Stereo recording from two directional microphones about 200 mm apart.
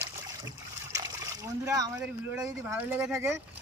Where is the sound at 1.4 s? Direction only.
15° right (ahead or behind).